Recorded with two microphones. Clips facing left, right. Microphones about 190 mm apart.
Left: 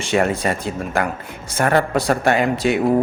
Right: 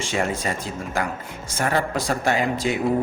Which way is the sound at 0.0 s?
65° left (ahead or behind).